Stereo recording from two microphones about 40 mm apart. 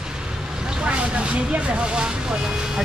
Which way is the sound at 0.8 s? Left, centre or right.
Right.